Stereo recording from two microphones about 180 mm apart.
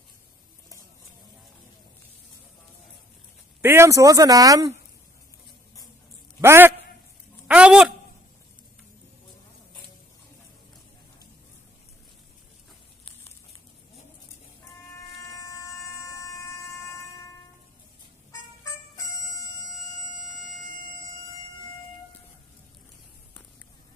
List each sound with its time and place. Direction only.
3.6 s speech: 15° right (ahead or behind)
6.4 s a man's voice: 15° right (ahead or behind)
7.4 s a sound: 5° right (ahead or behind)